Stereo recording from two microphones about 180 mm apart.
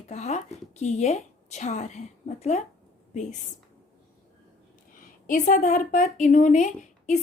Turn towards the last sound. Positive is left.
turn(degrees=40)  # may be behind; listen again after turning